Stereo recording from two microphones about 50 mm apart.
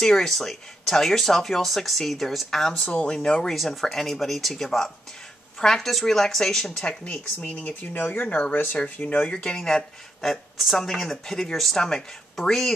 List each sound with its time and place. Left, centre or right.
0.0 s speech: centre
3.5 s speech: centre
7.1 s speech: left
9.4 s speech: centre
10.3 s speech: centre